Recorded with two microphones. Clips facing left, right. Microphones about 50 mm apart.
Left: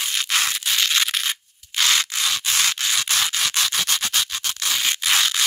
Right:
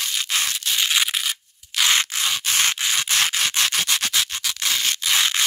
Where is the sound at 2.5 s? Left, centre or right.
Right.